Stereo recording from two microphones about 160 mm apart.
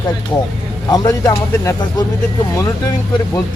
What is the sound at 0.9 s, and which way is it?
Speech, 25° left (ahead or behind).